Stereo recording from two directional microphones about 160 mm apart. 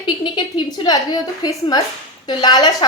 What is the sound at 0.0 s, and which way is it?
A woman's voice, 30° left (ahead or behind).